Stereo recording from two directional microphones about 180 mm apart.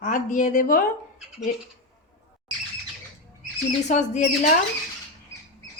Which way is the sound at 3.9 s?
40° left (ahead or behind).